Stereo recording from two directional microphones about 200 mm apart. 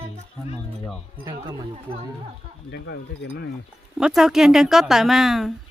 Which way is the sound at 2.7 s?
55° left (ahead or behind).